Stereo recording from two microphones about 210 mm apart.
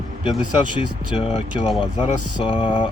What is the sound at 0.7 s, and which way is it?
Speech, 25° left (ahead or behind).